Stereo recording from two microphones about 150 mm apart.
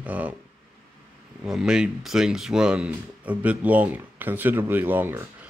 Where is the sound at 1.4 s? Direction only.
5° right (ahead or behind).